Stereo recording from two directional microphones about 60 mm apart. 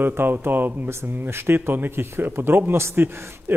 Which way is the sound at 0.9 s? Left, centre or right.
Right.